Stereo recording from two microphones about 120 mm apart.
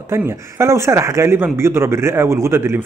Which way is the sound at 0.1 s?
20° right (ahead or behind).